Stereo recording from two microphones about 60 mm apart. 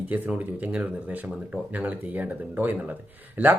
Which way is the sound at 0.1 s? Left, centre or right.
Right.